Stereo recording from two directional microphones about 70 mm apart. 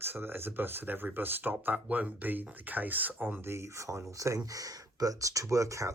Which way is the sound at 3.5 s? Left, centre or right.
Right.